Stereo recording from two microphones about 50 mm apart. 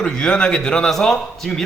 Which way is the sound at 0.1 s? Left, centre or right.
Centre.